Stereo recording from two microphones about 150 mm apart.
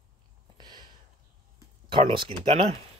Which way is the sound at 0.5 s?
30° right (ahead or behind).